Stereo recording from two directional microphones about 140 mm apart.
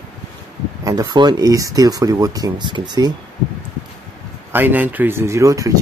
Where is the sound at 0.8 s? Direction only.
30° right (ahead or behind).